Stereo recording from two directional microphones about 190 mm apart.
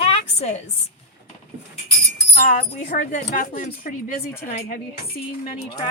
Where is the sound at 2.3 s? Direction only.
40° left (ahead or behind).